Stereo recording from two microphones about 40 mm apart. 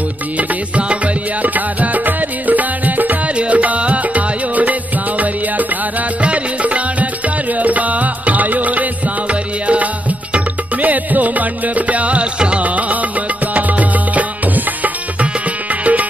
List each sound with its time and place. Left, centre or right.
0.4 s music: right
1.5 s music: right
3.3 s music: right
6.2 s music: right
15.8 s music: right